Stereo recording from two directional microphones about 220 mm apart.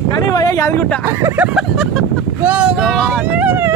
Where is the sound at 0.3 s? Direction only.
15° left (ahead or behind).